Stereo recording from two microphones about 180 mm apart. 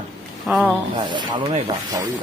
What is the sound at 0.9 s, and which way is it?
Speech, 25° right (ahead or behind).